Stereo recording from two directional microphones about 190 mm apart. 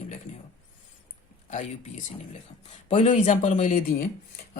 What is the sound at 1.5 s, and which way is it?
Speech, 40° left (ahead or behind).